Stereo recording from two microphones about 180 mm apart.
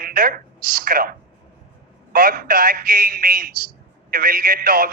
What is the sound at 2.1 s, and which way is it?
A man's voice, 55° right (ahead or behind).